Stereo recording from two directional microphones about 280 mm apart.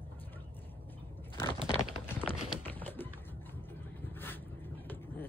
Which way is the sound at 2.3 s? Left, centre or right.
Centre.